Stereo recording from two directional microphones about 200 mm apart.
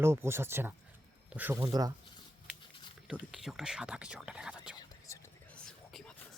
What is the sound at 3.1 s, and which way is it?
Speech, 5° right (ahead or behind).